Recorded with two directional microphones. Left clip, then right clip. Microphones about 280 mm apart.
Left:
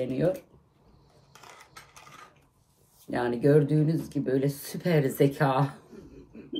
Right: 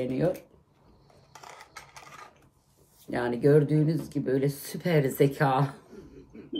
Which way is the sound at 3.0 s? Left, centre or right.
Centre.